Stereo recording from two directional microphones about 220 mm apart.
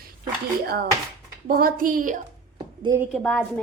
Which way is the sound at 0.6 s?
45° right (ahead or behind).